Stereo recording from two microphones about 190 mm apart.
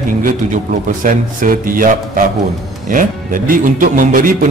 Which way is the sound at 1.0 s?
45° right (ahead or behind).